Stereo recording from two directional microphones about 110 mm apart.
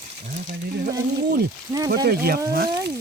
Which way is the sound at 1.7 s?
35° right (ahead or behind).